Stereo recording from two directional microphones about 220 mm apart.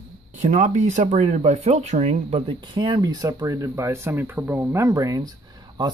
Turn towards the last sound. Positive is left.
turn(degrees=-20)  # may be behind; listen again after turning